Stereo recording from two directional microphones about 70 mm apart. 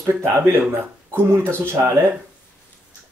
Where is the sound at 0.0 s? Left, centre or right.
Right.